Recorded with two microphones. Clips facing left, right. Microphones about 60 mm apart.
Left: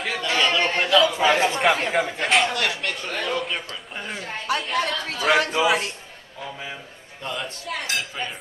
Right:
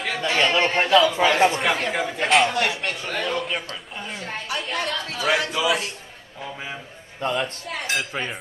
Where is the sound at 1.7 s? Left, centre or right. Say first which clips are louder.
Left 2 dB; centre.